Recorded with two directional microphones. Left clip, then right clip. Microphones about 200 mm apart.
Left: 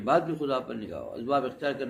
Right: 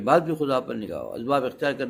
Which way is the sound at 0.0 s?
50° right (ahead or behind).